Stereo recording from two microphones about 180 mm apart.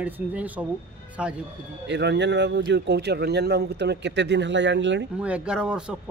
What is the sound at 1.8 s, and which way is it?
Speech, 75° right (ahead or behind).